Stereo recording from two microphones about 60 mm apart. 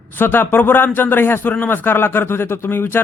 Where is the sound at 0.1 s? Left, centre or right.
Left.